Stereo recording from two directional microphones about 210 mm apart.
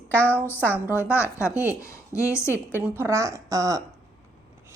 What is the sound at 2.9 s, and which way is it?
Speech, 15° right (ahead or behind).